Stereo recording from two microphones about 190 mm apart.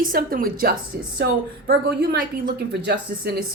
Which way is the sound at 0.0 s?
50° right (ahead or behind).